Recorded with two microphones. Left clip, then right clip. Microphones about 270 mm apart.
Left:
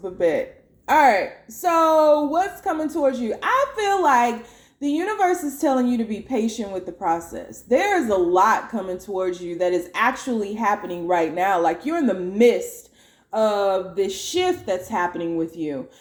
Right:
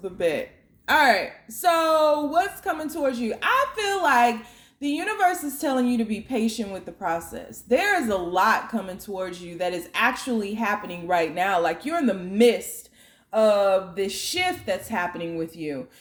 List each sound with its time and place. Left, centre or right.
0.2 s speech: right
14.1 s speech: right
14.8 s speech: right